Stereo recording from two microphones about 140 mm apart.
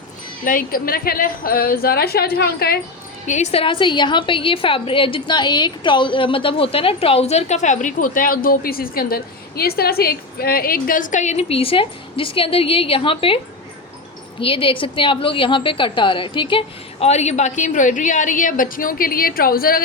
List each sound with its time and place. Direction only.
0.4 s a woman's voice: 85° left
3.2 s a woman's voice: 55° left (ahead or behind)
14.4 s a woman's voice: 40° left (ahead or behind); by 19.8 s 90° left